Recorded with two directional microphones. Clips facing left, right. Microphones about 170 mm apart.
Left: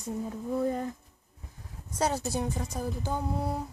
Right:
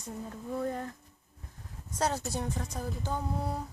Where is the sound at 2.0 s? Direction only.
5° left (ahead or behind).